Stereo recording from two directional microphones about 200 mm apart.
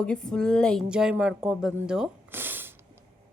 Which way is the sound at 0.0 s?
5° left (ahead or behind).